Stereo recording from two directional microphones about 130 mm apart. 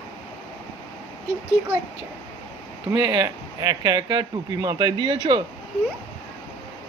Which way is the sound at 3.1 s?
30° right (ahead or behind).